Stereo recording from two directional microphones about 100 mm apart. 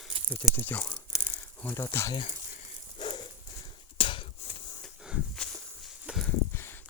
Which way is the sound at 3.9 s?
55° left (ahead or behind).